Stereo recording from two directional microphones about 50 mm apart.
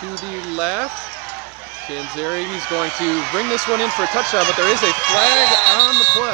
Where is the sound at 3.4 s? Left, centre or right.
Centre.